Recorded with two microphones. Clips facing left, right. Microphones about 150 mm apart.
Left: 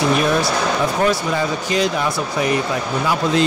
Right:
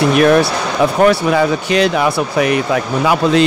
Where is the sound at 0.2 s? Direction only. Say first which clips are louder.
Right 6 dB; 65° right (ahead or behind).